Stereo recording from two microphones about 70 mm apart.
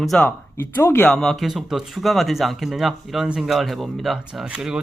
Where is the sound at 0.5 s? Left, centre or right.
Left.